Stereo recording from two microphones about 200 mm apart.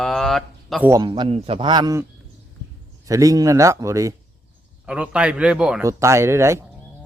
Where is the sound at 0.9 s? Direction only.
20° right (ahead or behind).